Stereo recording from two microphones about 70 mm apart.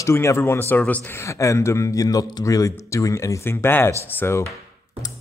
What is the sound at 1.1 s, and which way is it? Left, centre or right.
Speech, left.